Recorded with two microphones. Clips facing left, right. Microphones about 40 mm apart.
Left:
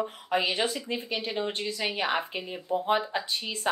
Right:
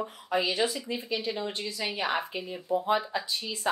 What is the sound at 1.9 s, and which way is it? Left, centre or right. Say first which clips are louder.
A woman's voice: even; centre.